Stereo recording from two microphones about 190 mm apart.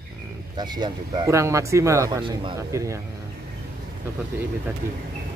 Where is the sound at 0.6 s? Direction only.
20° right (ahead or behind).